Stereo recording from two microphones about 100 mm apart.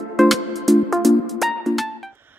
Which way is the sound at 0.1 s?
Centre (ahead or behind).